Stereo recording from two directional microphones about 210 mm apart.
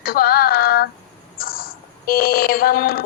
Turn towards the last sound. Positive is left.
turn(degrees=45)  # may be behind; listen again after turning